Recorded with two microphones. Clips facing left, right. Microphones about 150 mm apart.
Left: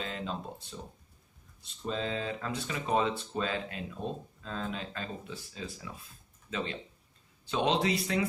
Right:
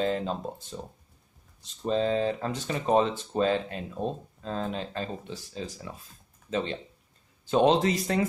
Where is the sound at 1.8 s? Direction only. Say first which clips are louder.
Right 8 dB; 40° right (ahead or behind).